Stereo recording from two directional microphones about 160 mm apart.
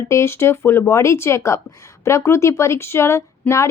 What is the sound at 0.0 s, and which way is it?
Speech, 15° left (ahead or behind).